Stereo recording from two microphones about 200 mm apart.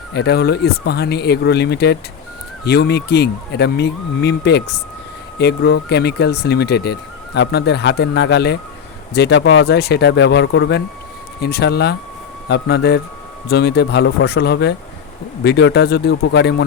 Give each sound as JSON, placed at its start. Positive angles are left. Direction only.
{"t": 0.1, "sound": "speech", "side_deg": 55}